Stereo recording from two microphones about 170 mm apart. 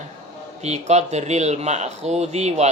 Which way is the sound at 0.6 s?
40° right (ahead or behind).